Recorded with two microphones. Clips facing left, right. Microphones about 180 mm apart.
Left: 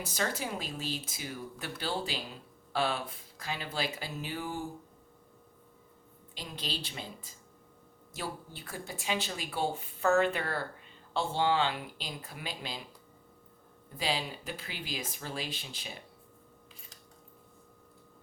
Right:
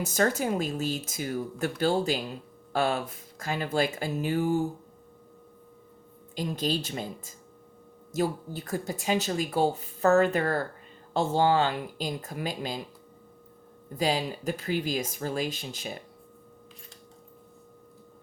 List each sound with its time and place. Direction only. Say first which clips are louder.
0.0 s speech: right 8 dB; 45° right (ahead or behind)
6.3 s speech: right 11 dB; 45° right (ahead or behind)
13.9 s speech: right 7 dB; 45° right (ahead or behind)